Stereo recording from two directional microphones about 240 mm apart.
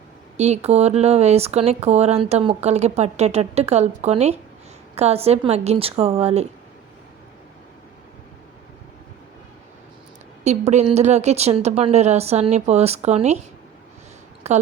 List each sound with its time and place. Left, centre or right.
0.3 s speech: right
10.4 s speech: right
14.5 s speech: right